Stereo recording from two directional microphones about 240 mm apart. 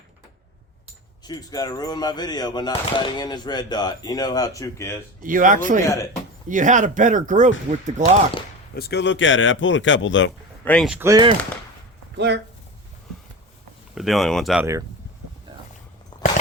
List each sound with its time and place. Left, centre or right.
1.2 s speech: centre
5.2 s speech: right
8.7 s speech: left
10.7 s speech: centre
12.1 s speech: right
13.9 s speech: centre